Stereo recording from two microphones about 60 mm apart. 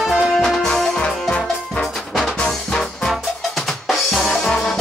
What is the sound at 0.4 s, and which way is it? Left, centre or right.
Music, centre.